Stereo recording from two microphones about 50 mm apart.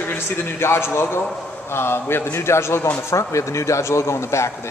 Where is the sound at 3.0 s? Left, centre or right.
Left.